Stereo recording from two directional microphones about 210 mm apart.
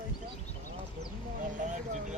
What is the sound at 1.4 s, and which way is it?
Vehicle, 35° right (ahead or behind).